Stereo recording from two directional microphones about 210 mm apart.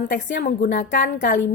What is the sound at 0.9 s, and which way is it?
Speech, 55° left (ahead or behind).